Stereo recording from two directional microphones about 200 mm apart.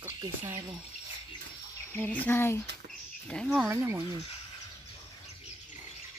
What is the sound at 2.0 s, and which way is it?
Speech, 10° left (ahead or behind).